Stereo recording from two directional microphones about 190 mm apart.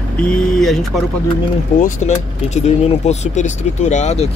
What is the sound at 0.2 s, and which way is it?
Speech, 5° left (ahead or behind).